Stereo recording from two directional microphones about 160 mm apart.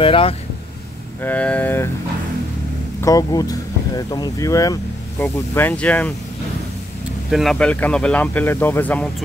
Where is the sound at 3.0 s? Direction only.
20° left (ahead or behind).